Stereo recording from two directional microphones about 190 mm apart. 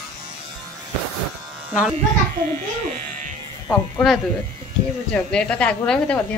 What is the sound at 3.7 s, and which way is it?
Speech, 10° left (ahead or behind).